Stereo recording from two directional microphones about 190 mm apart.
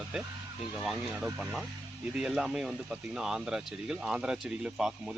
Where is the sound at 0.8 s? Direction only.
5° right (ahead or behind).